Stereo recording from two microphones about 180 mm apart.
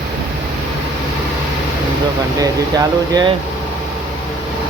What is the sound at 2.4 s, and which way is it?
Speech, 20° right (ahead or behind).